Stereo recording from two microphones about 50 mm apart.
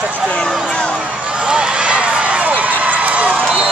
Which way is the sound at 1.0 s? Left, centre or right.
Centre.